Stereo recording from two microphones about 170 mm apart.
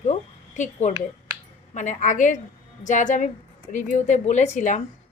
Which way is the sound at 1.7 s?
45° left (ahead or behind).